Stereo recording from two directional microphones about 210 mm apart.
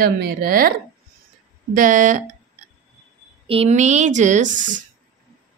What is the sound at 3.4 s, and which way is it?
A woman's voice, 30° right (ahead or behind).